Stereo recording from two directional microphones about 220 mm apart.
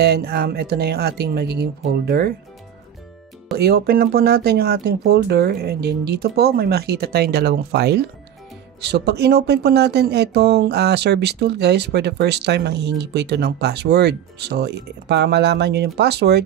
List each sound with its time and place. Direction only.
0.0 s speech: 45° right (ahead or behind)
3.5 s speech: 45° right (ahead or behind)